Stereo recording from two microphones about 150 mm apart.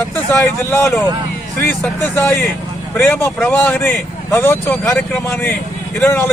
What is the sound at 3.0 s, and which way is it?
Speech, 10° left (ahead or behind).